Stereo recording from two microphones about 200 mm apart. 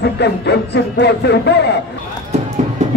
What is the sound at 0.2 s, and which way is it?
Speech, 55° left (ahead or behind).